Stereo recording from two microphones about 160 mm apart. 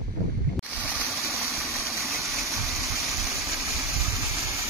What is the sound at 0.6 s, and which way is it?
Boat, 5° right (ahead or behind).